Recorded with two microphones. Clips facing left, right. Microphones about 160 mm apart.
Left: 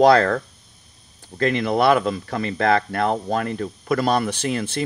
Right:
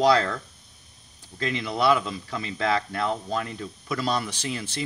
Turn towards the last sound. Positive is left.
turn(degrees=60)  # may be behind; listen again after turning